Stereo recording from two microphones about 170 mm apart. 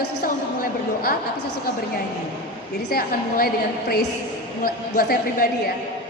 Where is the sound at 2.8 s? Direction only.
60° left (ahead or behind).